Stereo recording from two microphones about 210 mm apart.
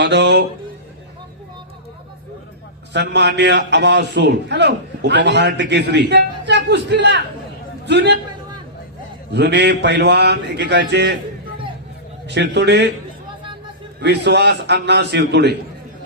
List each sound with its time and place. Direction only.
0.0 s a man's voice: 55° right (ahead or behind)
2.9 s a man's voice: 55° right (ahead or behind)
9.3 s a man's voice: 55° right (ahead or behind)
12.3 s a man's voice: 55° right (ahead or behind)
14.0 s a man's voice: 55° right (ahead or behind)